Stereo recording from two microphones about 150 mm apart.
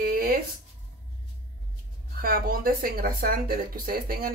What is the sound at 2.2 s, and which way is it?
Speech, 75° right (ahead or behind).